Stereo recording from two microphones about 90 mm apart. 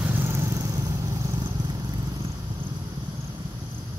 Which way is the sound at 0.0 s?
25° right (ahead or behind).